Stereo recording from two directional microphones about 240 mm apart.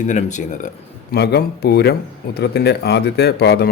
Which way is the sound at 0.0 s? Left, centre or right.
Left.